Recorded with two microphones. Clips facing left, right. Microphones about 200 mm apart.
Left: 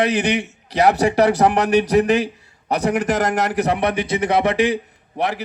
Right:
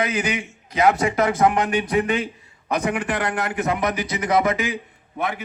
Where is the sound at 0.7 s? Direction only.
35° left (ahead or behind).